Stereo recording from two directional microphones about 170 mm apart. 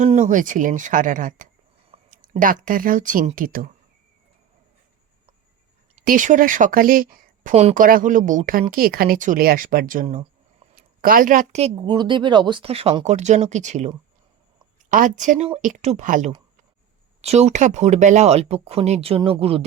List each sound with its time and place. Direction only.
0.0 s speech: 45° right (ahead or behind)
6.1 s speech: 50° right (ahead or behind)
7.5 s a woman's voice: 45° right (ahead or behind)
11.6 s speech: 25° right (ahead or behind)